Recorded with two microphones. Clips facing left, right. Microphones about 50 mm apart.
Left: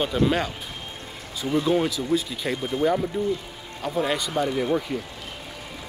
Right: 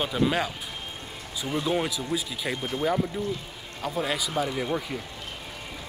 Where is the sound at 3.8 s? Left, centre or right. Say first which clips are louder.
Left 3 dB; centre.